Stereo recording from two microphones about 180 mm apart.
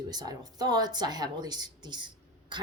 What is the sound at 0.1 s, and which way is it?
Speech, 20° right (ahead or behind).